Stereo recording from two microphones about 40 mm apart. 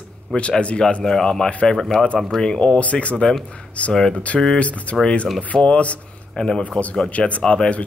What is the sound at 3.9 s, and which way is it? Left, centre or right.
Speech, centre.